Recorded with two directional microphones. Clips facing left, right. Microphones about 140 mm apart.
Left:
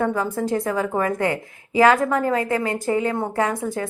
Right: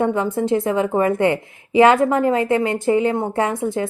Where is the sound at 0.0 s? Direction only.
25° right (ahead or behind).